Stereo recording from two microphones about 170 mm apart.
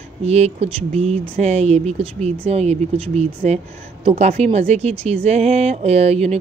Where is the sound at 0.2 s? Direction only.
40° right (ahead or behind).